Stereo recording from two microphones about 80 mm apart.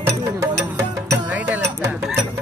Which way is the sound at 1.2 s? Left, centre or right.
Right.